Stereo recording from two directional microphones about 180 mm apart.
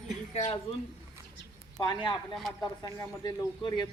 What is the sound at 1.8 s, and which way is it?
Speech, 25° left (ahead or behind).